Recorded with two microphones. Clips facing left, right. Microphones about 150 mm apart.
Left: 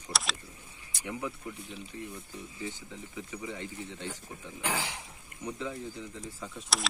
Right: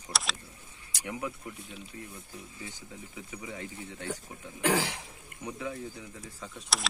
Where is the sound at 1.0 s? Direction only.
15° right (ahead or behind).